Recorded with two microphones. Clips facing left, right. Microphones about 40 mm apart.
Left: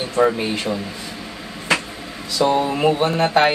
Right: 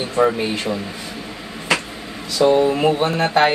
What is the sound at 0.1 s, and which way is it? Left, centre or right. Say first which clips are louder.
Speech: even; centre.